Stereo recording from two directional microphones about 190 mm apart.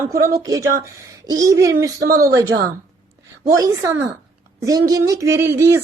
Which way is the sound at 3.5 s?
15° right (ahead or behind).